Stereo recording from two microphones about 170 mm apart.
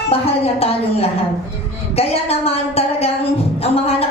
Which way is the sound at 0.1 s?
35° left (ahead or behind).